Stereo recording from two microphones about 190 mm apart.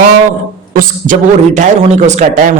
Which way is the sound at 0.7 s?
45° right (ahead or behind).